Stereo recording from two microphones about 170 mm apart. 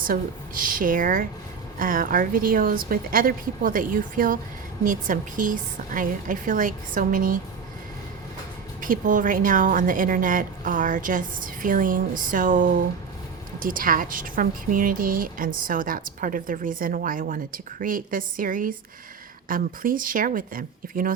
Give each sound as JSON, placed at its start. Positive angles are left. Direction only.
{"t": 0.0, "sound": "a woman's voice", "side_deg": -55}
{"t": 8.8, "sound": "a woman's voice", "side_deg": -50}